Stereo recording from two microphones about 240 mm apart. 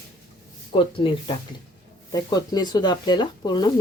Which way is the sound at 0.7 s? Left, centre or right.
Left.